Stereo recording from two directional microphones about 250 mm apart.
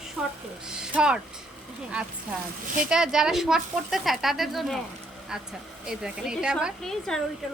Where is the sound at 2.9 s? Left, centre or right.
Centre.